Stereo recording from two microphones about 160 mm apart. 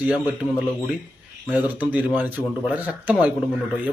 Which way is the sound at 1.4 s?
10° right (ahead or behind).